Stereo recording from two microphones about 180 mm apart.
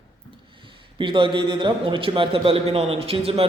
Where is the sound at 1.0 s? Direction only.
25° right (ahead or behind).